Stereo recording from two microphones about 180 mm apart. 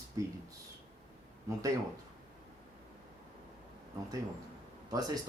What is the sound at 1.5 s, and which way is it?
Speech, 15° right (ahead or behind).